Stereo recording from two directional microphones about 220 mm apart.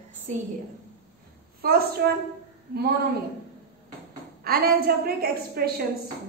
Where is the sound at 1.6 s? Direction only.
40° right (ahead or behind).